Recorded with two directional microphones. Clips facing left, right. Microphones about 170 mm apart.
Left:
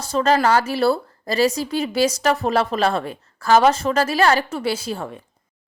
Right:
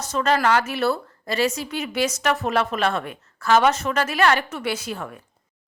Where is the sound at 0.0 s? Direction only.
35° left (ahead or behind).